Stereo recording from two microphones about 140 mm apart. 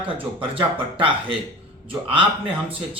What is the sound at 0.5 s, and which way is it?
Speech, 40° right (ahead or behind).